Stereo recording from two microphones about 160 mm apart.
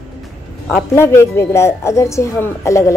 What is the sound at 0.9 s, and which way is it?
A woman's voice, 15° left (ahead or behind).